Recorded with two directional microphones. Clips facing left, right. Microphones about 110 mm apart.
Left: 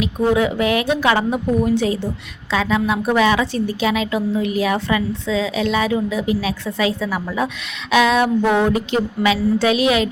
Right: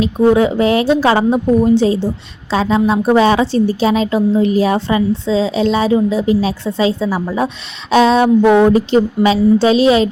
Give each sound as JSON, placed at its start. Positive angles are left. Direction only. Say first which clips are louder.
{"t": 0.0, "sound": "a woman's voice", "louder": "right 6 dB", "side_deg": -30}